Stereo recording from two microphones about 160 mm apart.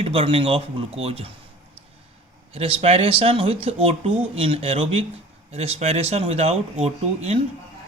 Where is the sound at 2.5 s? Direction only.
35° right (ahead or behind).